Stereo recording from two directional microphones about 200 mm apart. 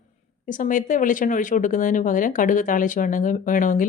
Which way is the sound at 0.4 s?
40° left (ahead or behind).